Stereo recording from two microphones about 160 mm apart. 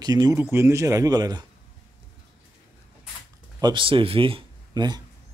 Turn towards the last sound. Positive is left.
turn(degrees=-25)  # may be behind; listen again after turning